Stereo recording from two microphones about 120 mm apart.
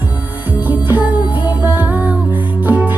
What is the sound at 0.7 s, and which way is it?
Music, 15° right (ahead or behind).